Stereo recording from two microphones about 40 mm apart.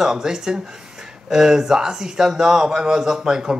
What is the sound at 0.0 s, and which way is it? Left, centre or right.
Speech, centre.